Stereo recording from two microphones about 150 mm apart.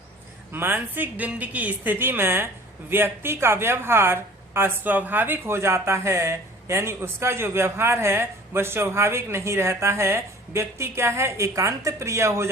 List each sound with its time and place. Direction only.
0.5 s a woman's voice: 15° right (ahead or behind)